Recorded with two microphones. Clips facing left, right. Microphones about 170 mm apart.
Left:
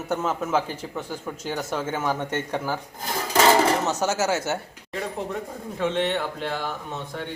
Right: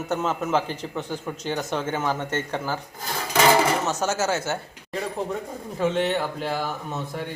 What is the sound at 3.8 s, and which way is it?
Speech, 15° left (ahead or behind).